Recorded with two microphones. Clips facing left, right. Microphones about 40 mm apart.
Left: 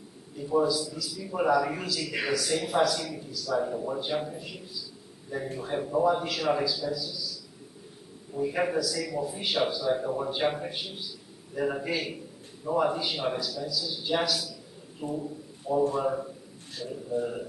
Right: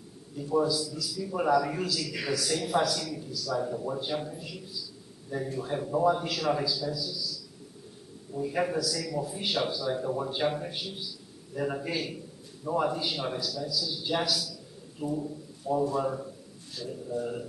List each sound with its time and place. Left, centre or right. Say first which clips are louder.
0.4 s speech: left 1 dB; centre
2.0 s speech: left 2 dB; left
2.3 s speech: left 1 dB; centre
5.6 s speech: left 1 dB; centre
8.4 s a man's voice: left 2 dB; centre
15.9 s speech: left 2 dB; centre